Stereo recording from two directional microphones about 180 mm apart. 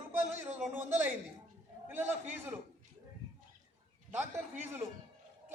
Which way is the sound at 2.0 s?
10° right (ahead or behind).